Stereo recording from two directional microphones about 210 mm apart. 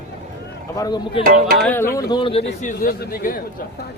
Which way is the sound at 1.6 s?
10° left (ahead or behind).